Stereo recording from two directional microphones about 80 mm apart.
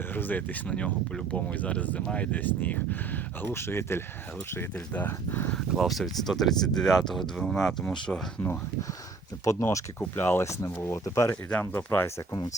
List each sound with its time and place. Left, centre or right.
0.1 s speech: left
5.7 s speech: centre
9.4 s speech: left
10.0 s speech: left
11.7 s speech: left